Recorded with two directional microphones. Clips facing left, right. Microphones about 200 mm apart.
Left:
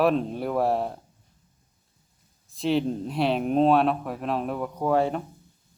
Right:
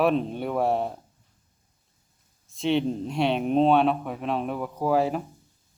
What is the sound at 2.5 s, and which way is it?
Speech, centre (ahead or behind).